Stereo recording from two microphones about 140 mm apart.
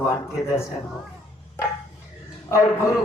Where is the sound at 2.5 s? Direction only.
20° left (ahead or behind).